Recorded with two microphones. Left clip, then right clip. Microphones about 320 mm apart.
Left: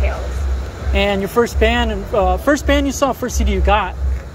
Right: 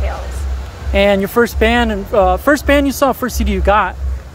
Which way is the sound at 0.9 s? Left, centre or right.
Centre.